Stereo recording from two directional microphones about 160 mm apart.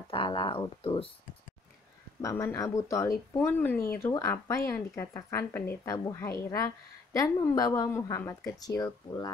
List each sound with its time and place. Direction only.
0.1 s speech: 30° left (ahead or behind)
2.2 s speech: 15° left (ahead or behind)